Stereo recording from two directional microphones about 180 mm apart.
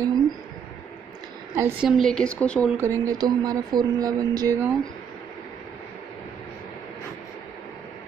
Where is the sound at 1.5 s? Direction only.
15° right (ahead or behind).